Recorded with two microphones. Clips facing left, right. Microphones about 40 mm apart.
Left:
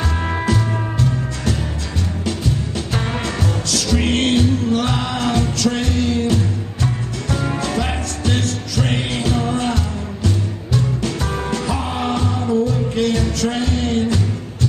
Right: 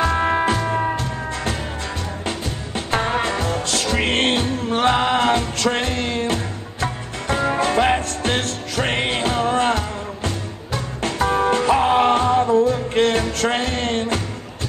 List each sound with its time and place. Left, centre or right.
0.0 s music: right
2.2 s music: right
11.1 s music: right